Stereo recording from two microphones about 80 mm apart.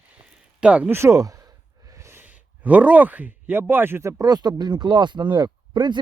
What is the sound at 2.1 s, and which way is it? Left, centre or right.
Speech, centre.